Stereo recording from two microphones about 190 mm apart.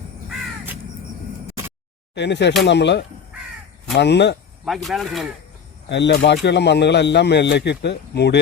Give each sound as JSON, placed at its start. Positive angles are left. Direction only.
{"t": 0.3, "sound": "crow", "side_deg": -10}
{"t": 2.1, "sound": "speech", "side_deg": 65}
{"t": 4.6, "sound": "speech", "side_deg": 0}
{"t": 5.9, "sound": "speech", "side_deg": 65}